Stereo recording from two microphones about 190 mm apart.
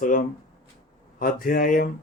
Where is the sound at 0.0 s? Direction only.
45° left (ahead or behind).